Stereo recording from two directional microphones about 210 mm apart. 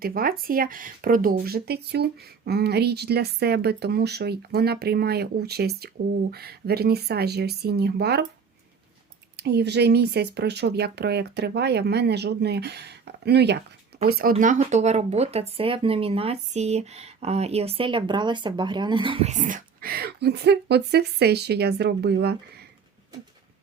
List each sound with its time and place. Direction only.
0.0 s speech: 45° right (ahead or behind)
9.3 s speech: 50° right (ahead or behind)